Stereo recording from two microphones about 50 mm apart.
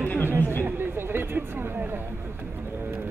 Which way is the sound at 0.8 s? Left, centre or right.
Right.